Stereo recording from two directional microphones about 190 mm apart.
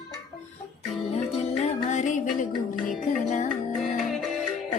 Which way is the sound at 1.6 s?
40° left (ahead or behind).